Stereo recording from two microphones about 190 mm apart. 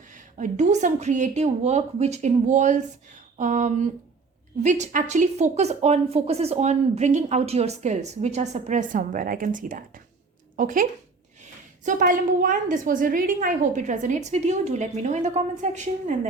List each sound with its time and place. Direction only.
0.1 s speech: 40° right (ahead or behind)
11.9 s speech: 45° right (ahead or behind)